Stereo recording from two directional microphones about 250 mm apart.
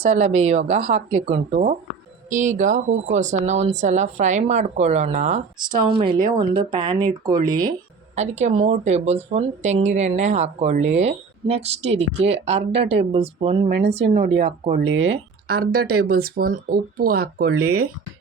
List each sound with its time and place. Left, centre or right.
0.0 s speech: right
5.5 s speech: centre
6.1 s speech: right
6.7 s speech: centre
8.1 s speech: right
15.4 s speech: right